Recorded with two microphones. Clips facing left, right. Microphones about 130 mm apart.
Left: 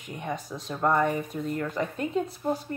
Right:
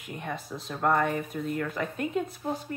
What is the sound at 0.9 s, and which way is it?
Speech, 15° left (ahead or behind).